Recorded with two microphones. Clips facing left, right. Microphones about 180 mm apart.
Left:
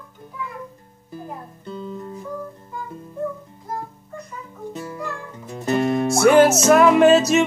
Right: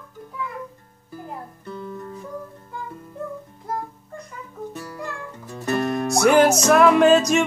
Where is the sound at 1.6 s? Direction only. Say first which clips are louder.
Left 3 dB; 20° left (ahead or behind).